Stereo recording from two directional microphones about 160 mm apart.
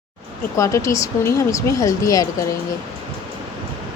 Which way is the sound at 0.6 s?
20° left (ahead or behind).